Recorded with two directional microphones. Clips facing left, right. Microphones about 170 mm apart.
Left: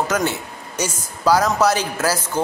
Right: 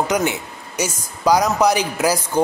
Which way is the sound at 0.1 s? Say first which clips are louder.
Right 1 dB; 15° right (ahead or behind).